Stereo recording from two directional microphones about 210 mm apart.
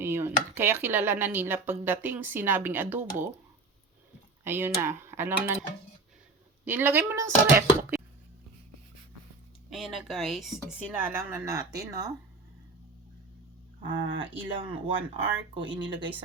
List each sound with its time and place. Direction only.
0.0 s speech: 10° right (ahead or behind)
4.4 s speech: 10° right (ahead or behind)
6.7 s speech: 10° right (ahead or behind)
9.6 s speech: centre (ahead or behind); by 12.1 s 15° right (ahead or behind)
13.8 s speech: 25° right (ahead or behind)